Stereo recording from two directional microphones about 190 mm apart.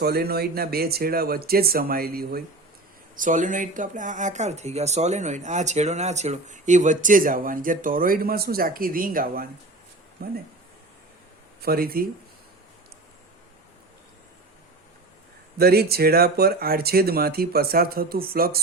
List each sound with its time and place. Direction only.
0.0 s speech: 55° right (ahead or behind)
3.2 s speech: 40° right (ahead or behind)
11.6 s speech: 55° right (ahead or behind)
15.5 s speech: 55° right (ahead or behind)